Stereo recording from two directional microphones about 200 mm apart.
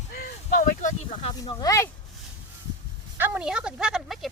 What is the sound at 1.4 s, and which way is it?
Speech, 20° left (ahead or behind).